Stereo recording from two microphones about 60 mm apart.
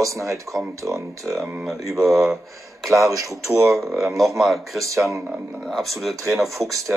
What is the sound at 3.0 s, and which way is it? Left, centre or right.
Speech, right.